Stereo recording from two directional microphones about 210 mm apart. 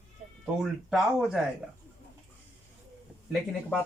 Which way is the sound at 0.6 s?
Centre (ahead or behind).